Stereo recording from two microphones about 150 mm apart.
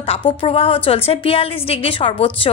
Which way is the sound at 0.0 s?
35° left (ahead or behind).